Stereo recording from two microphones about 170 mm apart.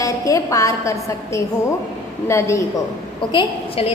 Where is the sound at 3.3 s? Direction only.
30° left (ahead or behind).